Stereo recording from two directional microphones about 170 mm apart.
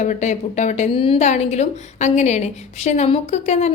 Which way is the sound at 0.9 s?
30° left (ahead or behind).